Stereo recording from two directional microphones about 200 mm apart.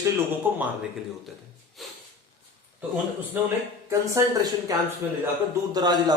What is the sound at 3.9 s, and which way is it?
A man's voice, 15° right (ahead or behind).